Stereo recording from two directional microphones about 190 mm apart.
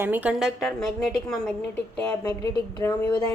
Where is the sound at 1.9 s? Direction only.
10° left (ahead or behind).